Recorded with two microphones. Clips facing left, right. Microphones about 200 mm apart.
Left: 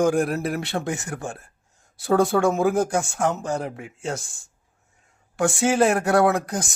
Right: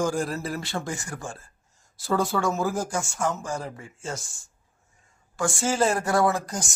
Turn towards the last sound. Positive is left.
turn(degrees=60)  # may be behind; listen again after turning